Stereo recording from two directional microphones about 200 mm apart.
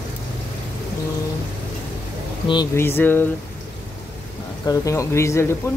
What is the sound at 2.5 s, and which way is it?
Speech, 15° left (ahead or behind).